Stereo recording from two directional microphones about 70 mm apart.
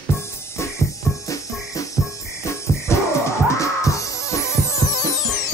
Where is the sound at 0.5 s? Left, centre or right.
Left.